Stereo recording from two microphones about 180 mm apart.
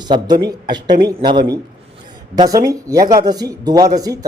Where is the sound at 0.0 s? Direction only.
25° right (ahead or behind).